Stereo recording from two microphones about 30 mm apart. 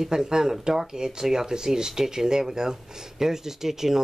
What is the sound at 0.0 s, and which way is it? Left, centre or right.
Speech, right.